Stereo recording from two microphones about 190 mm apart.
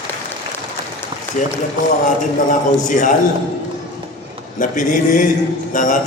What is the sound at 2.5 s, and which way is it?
Speech, 40° left (ahead or behind).